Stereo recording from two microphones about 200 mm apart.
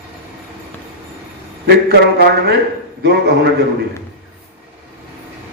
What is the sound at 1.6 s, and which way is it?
Speech, 55° right (ahead or behind).